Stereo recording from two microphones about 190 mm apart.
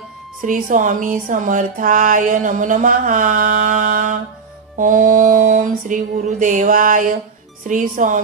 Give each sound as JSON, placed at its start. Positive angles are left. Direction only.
{"t": 0.4, "sound": "speech", "side_deg": -45}